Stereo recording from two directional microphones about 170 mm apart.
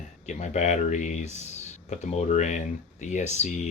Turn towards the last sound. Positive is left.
turn(degrees=45)  # may be behind; listen again after turning